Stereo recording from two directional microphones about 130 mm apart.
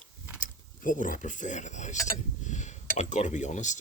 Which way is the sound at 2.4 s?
65° left (ahead or behind).